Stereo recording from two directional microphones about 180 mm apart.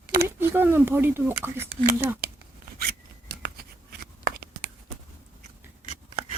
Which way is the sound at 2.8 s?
60° right (ahead or behind).